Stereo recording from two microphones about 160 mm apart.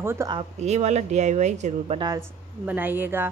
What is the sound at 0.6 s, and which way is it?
Speech, 45° right (ahead or behind).